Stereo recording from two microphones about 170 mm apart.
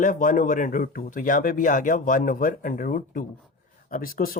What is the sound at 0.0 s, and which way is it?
Speech, 50° left (ahead or behind).